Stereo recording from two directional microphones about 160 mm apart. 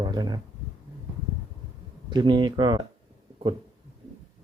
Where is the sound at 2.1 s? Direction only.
30° right (ahead or behind).